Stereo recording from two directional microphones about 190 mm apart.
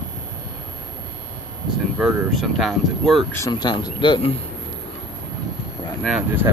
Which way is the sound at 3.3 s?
20° left (ahead or behind).